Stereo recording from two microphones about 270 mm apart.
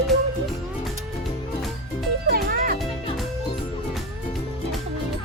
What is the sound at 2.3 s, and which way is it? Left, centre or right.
Music, right.